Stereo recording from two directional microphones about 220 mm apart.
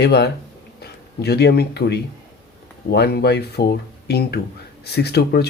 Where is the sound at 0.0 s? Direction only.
50° left (ahead or behind).